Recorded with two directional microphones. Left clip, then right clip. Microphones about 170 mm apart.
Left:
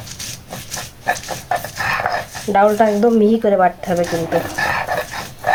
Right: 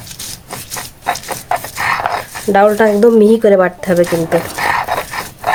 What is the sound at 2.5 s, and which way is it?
Speech, 90° right.